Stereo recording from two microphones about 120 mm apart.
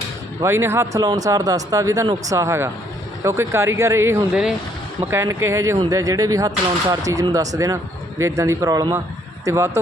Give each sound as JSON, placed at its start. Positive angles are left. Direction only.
{"t": 0.4, "sound": "speech", "side_deg": -20}